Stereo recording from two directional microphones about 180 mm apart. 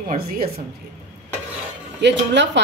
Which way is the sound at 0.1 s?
55° right (ahead or behind).